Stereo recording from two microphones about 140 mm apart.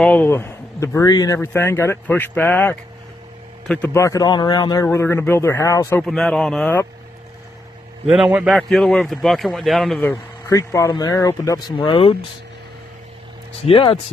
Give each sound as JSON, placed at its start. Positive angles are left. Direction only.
{"t": 0.0, "sound": "a man's voice", "side_deg": 10}
{"t": 3.9, "sound": "speech", "side_deg": 25}
{"t": 4.8, "sound": "speech", "side_deg": 15}
{"t": 6.0, "sound": "speech", "side_deg": 5}
{"t": 8.1, "sound": "a man's voice", "side_deg": -10}
{"t": 10.0, "sound": "speech", "side_deg": 20}
{"t": 13.6, "sound": "speech", "side_deg": 40}